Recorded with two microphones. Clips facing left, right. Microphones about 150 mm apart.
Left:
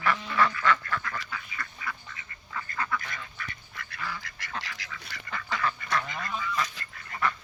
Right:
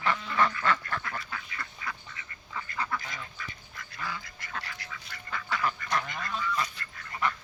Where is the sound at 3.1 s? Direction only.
65° left (ahead or behind).